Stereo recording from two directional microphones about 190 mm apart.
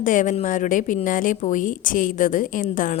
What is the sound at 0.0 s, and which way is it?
A woman's voice, 45° left (ahead or behind).